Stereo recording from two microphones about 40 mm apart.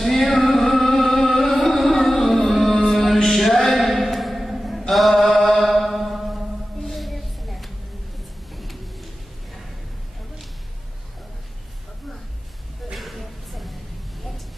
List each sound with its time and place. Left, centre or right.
0.0 s music: centre
3.7 s mantra: centre
5.1 s mantra: centre
5.8 s mantra: centre
6.9 s a sound: centre
12.9 s a sound: centre